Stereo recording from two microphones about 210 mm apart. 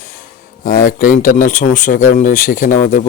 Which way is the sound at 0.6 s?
40° left (ahead or behind).